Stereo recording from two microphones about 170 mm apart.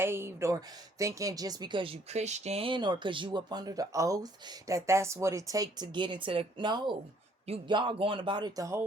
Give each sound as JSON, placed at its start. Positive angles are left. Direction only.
{"t": 0.0, "sound": "a woman's voice", "side_deg": -15}